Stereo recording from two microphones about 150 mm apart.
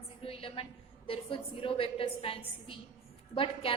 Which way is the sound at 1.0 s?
35° left (ahead or behind).